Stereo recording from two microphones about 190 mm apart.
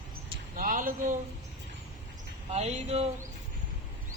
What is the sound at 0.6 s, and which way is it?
Speech, 45° right (ahead or behind).